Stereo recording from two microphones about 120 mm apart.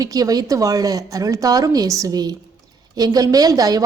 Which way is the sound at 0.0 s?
30° right (ahead or behind).